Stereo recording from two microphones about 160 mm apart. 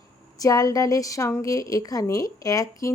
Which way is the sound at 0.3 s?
20° left (ahead or behind).